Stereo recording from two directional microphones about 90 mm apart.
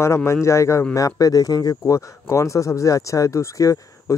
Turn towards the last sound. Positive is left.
turn(degrees=35)  # may be behind; listen again after turning